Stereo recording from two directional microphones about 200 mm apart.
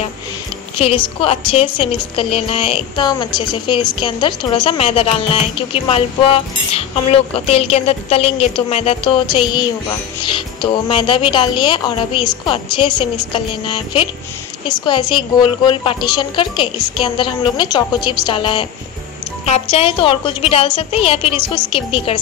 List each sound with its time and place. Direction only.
0.7 s a woman's voice: 25° left (ahead or behind)